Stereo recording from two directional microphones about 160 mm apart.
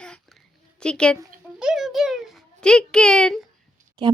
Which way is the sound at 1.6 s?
5° right (ahead or behind).